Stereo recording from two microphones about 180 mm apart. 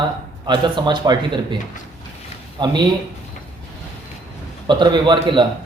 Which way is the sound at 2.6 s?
25° right (ahead or behind).